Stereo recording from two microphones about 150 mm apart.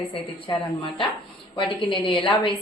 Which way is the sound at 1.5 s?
35° left (ahead or behind).